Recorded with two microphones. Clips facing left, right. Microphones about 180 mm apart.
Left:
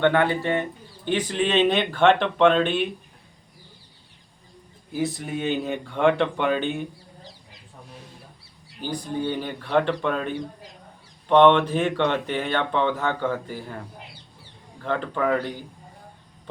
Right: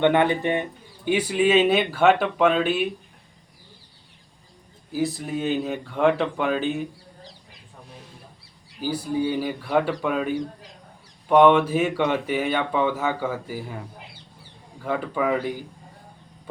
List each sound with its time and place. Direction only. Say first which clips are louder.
0.0 s speech: right 1 dB; 20° right (ahead or behind)
4.9 s speech: right 1 dB; centre (ahead or behind)
8.8 s speech: right 3 dB; 5° right (ahead or behind)